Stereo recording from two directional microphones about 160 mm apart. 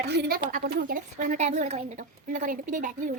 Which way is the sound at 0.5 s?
80° right.